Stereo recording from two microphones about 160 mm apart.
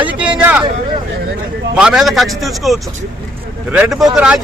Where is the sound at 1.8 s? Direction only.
5° right (ahead or behind).